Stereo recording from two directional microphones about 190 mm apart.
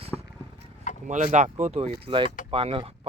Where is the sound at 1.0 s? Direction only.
40° right (ahead or behind).